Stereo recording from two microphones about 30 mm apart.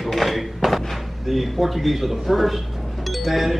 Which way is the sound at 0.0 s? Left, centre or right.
Centre.